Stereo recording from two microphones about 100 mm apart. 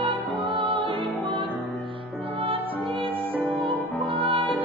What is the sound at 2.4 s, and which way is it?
Music, 65° right (ahead or behind).